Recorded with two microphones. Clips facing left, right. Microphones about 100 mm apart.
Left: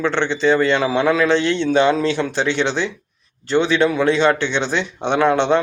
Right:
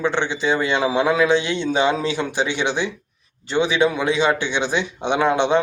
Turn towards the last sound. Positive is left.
turn(degrees=-15)  # may be behind; listen again after turning